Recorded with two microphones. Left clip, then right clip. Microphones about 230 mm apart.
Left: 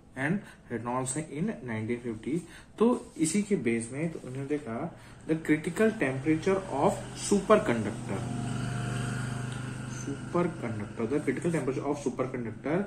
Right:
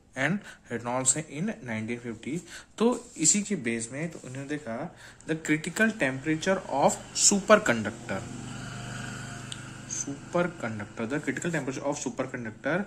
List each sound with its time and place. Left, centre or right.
0.2 s speech: right
5.3 s speech: right
10.3 s speech: right